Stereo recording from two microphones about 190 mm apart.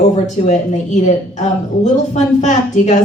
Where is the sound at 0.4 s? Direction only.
40° left (ahead or behind).